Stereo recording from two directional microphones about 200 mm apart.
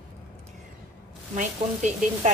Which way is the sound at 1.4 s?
35° right (ahead or behind).